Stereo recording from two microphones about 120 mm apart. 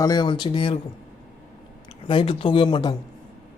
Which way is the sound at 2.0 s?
45° left (ahead or behind).